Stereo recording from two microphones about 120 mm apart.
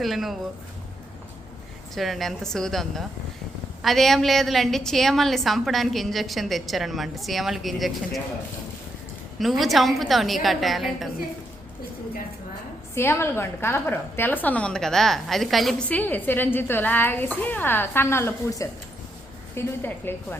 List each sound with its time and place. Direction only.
0.0 s a woman's voice: centre (ahead or behind)
2.0 s a woman's voice: centre (ahead or behind)
9.4 s a woman's voice: centre (ahead or behind)
12.9 s a woman's voice: 20° left (ahead or behind); by 15.7 s centre (ahead or behind)
15.9 s a woman's voice: 15° left (ahead or behind)